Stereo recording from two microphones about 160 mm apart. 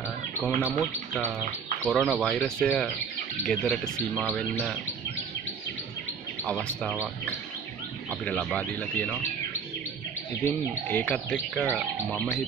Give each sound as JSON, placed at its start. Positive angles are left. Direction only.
{"t": 0.4, "sound": "speech", "side_deg": 10}
{"t": 1.9, "sound": "speech", "side_deg": 0}
{"t": 8.1, "sound": "speech", "side_deg": 5}
{"t": 10.9, "sound": "speech", "side_deg": 10}
{"t": 11.6, "sound": "speech", "side_deg": -10}
{"t": 12.1, "sound": "speech", "side_deg": 10}